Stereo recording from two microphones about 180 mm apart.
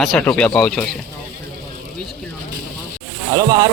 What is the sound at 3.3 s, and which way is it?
Speech, 20° right (ahead or behind).